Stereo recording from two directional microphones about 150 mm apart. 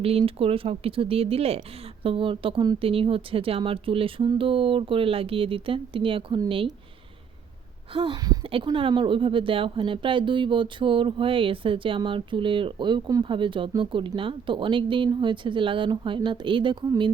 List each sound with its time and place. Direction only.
0.0 s speech: 40° right (ahead or behind)
7.9 s speech: 30° right (ahead or behind)